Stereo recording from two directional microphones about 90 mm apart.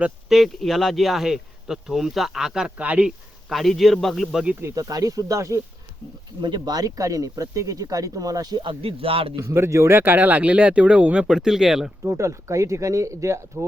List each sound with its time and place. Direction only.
0.3 s speech: centre (ahead or behind); by 3.1 s 15° right (ahead or behind)
3.5 s speech: centre (ahead or behind)
4.7 s speech: 45° right (ahead or behind)
6.4 s speech: 50° right (ahead or behind)
8.6 s speech: 90° right
9.3 s speech: 35° right (ahead or behind); by 11.9 s 5° right (ahead or behind)
12.0 s speech: 35° right (ahead or behind)